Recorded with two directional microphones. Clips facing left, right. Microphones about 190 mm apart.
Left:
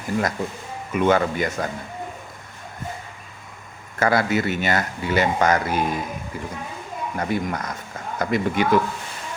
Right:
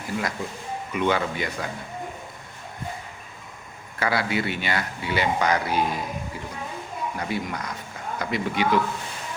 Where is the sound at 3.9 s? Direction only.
45° left (ahead or behind).